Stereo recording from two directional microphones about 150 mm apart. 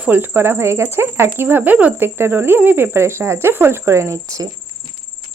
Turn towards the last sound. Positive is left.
turn(degrees=-20)  # may be behind; listen again after turning